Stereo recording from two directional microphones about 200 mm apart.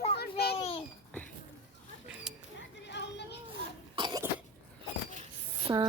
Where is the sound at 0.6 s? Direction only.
30° left (ahead or behind).